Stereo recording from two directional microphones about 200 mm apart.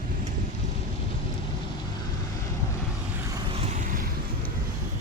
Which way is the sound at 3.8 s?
45° right (ahead or behind).